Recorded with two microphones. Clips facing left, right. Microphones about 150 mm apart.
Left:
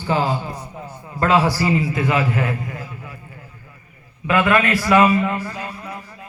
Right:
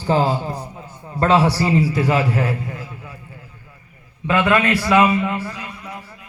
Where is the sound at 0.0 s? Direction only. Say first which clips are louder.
Right 2 dB; 35° right (ahead or behind).